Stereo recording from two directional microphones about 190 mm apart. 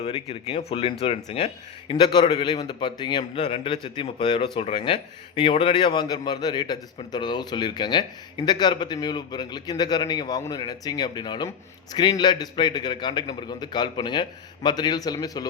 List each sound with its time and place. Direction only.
0.0 s a man's voice: 30° left (ahead or behind)